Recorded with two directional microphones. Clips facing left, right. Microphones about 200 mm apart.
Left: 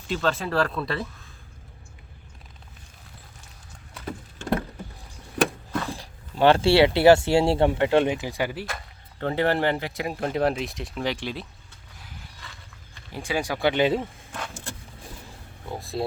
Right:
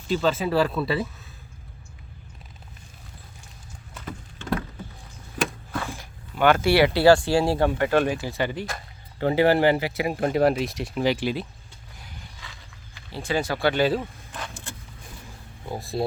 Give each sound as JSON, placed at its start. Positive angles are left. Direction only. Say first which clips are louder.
{"t": 0.1, "sound": "speech", "louder": "right 3 dB", "side_deg": 0}
{"t": 5.9, "sound": "speech", "louder": "left 2 dB", "side_deg": 35}
{"t": 9.1, "sound": "speech", "louder": "right 4 dB", "side_deg": -5}
{"t": 11.9, "sound": "a sound", "louder": "even", "side_deg": 0}
{"t": 13.1, "sound": "speech", "louder": "right 2 dB", "side_deg": 15}
{"t": 15.7, "sound": "speech", "louder": "right 2 dB", "side_deg": 0}